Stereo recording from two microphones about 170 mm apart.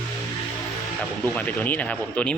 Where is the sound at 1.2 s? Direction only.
10° left (ahead or behind).